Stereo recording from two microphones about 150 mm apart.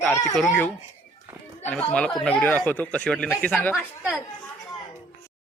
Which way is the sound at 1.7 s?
5° left (ahead or behind).